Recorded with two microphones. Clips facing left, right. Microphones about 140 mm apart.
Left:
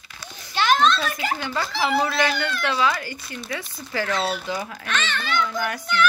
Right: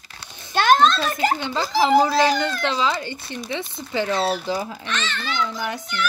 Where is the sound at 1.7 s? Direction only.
35° right (ahead or behind).